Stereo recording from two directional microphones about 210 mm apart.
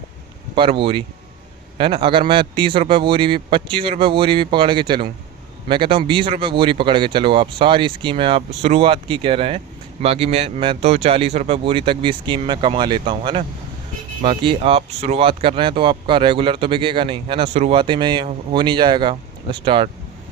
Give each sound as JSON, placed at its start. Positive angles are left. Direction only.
{"t": 0.5, "sound": "speech", "side_deg": -25}